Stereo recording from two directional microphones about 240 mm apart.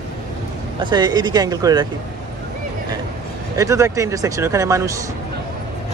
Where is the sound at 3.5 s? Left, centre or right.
Centre.